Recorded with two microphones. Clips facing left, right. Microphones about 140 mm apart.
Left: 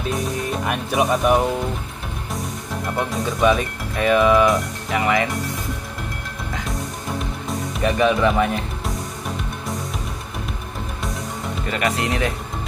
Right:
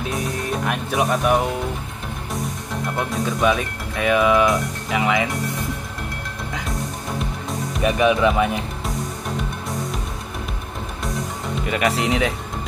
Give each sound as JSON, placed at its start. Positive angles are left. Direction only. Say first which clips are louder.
{"t": 0.1, "sound": "music", "louder": "left 2 dB", "side_deg": 0}
{"t": 3.0, "sound": "speech", "louder": "left 1 dB", "side_deg": 0}
{"t": 7.8, "sound": "speech", "louder": "right 1 dB", "side_deg": -10}
{"t": 11.6, "sound": "speech", "louder": "right 2 dB", "side_deg": -15}